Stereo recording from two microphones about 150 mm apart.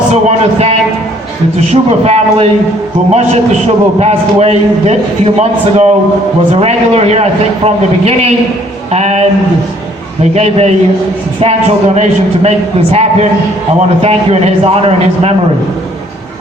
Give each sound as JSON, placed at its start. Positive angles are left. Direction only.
{"t": 0.1, "sound": "a sound", "side_deg": -45}
{"t": 1.7, "sound": "a man's voice", "side_deg": -45}
{"t": 10.3, "sound": "a man's voice", "side_deg": -45}
{"t": 11.9, "sound": "a man's voice", "side_deg": -45}